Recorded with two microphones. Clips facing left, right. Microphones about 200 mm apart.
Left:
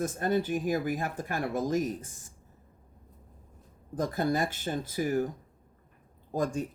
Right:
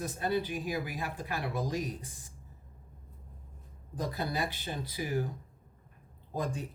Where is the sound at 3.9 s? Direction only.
50° left (ahead or behind).